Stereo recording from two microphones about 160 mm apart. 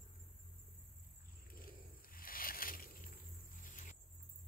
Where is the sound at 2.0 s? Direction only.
65° left (ahead or behind).